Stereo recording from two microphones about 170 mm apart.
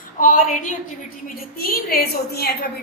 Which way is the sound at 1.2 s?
60° left (ahead or behind).